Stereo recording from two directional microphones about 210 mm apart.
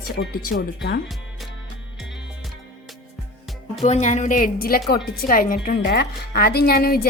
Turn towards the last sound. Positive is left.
turn(degrees=45)  # may be behind; listen again after turning